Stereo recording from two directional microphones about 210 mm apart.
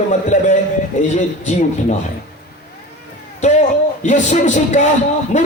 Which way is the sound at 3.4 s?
35° left (ahead or behind).